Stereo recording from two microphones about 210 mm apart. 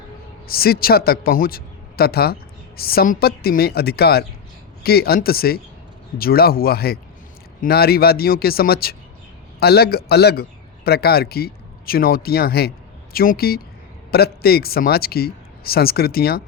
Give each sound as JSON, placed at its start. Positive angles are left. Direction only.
{"t": 0.4, "sound": "a man's voice", "side_deg": 45}